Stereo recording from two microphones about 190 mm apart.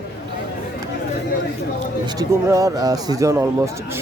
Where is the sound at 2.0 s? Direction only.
20° right (ahead or behind).